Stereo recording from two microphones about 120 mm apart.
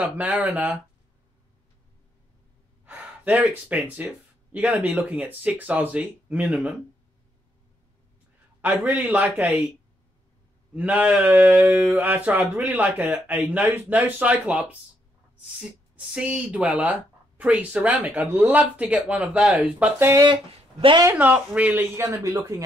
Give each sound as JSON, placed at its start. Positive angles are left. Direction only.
{"t": 0.0, "sound": "speech", "side_deg": -15}
{"t": 2.8, "sound": "speech", "side_deg": -15}
{"t": 8.5, "sound": "speech", "side_deg": -15}
{"t": 10.7, "sound": "speech", "side_deg": -10}
{"t": 16.1, "sound": "speech", "side_deg": -10}
{"t": 21.2, "sound": "speech", "side_deg": -10}